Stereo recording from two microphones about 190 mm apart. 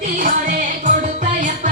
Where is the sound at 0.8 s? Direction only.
40° right (ahead or behind).